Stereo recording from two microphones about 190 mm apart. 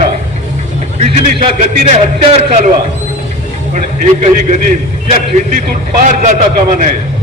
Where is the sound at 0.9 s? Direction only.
40° right (ahead or behind).